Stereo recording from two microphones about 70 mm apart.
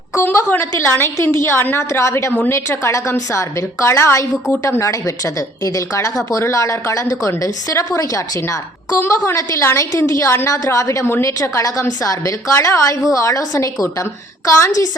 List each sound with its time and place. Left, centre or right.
0.2 s a woman's voice: left
8.9 s a woman's voice: left